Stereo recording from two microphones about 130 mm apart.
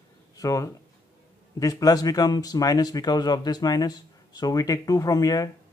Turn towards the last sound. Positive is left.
turn(degrees=25)  # may be behind; listen again after turning